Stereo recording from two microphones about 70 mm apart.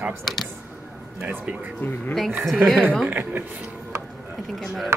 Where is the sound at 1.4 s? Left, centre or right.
Centre.